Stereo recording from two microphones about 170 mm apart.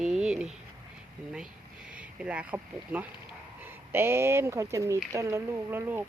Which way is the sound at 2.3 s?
5° right (ahead or behind).